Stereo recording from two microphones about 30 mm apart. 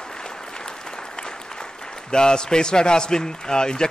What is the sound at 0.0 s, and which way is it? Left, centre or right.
Applause, left.